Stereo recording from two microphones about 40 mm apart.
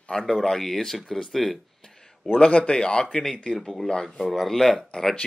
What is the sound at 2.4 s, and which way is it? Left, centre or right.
Speech, left.